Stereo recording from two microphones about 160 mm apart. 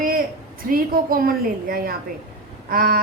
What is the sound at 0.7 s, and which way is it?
A woman's voice, 65° right (ahead or behind).